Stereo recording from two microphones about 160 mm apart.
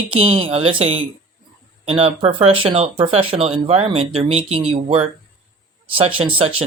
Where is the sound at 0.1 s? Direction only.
35° right (ahead or behind).